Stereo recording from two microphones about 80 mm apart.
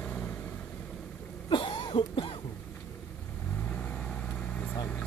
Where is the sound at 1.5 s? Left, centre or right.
Left.